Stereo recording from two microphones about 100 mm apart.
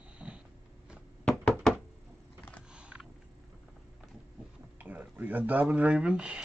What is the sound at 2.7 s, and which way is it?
Creak, 10° right (ahead or behind).